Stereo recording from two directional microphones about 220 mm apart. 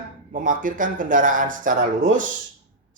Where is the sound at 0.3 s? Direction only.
35° right (ahead or behind).